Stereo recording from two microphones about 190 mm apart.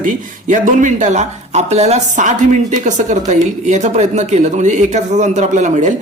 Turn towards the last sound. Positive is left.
turn(degrees=-40)  # may be behind; listen again after turning